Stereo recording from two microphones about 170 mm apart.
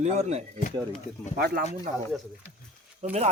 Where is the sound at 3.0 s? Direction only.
40° right (ahead or behind).